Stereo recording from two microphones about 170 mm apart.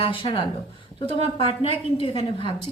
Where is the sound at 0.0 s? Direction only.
30° left (ahead or behind).